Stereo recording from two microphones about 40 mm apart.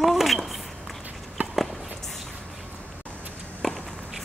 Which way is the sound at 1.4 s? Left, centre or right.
Right.